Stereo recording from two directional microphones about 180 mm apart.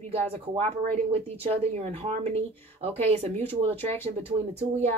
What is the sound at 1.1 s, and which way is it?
Speech, 35° right (ahead or behind).